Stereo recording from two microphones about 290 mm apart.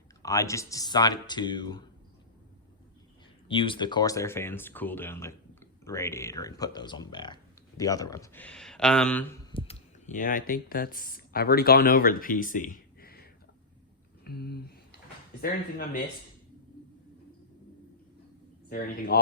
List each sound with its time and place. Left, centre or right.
0.2 s speech: centre
3.5 s speech: centre
14.3 s speech: left
18.7 s speech: left